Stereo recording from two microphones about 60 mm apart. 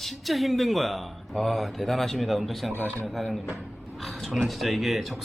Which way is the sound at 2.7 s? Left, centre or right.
Left.